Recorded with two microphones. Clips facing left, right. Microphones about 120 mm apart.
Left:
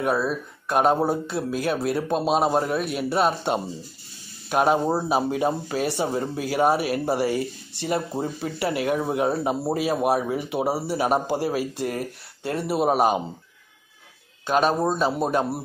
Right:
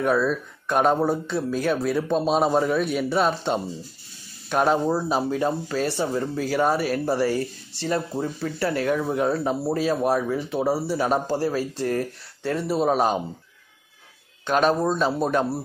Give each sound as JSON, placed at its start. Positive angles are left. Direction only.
{"t": 0.0, "sound": "speech", "side_deg": 5}
{"t": 14.7, "sound": "speech", "side_deg": 10}